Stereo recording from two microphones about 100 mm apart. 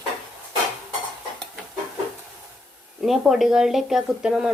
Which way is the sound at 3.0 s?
Centre (ahead or behind).